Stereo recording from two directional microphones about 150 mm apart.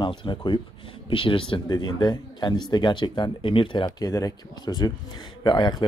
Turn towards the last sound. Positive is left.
turn(degrees=30)  # may be behind; listen again after turning